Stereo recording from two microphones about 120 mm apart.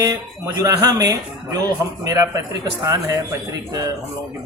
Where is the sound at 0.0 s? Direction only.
30° right (ahead or behind).